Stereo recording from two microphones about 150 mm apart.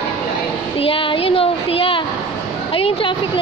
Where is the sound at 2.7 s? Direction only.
35° left (ahead or behind).